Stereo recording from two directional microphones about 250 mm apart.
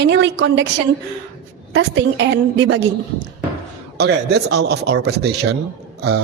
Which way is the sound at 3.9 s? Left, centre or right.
Right.